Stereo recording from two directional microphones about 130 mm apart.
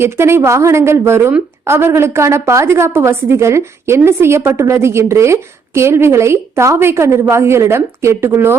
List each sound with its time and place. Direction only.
0.0 s a woman's voice: 20° right (ahead or behind)